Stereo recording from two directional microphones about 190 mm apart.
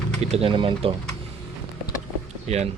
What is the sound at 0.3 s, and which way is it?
Speech, 30° right (ahead or behind).